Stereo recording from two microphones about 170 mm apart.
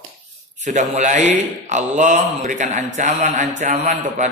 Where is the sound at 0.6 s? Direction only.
45° right (ahead or behind).